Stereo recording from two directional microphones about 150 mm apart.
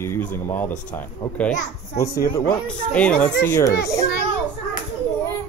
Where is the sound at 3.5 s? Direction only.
20° left (ahead or behind).